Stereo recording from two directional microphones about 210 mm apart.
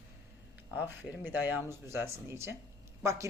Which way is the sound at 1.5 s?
10° right (ahead or behind).